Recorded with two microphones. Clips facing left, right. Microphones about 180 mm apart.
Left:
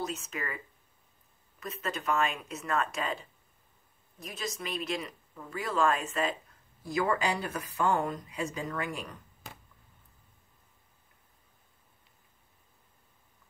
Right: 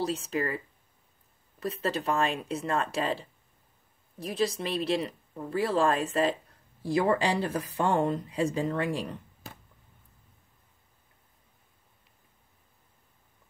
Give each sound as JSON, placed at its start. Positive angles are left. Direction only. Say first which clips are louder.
{"t": 0.0, "sound": "speech", "louder": "right 7 dB", "side_deg": -35}
{"t": 1.6, "sound": "speech", "louder": "right 6 dB", "side_deg": -30}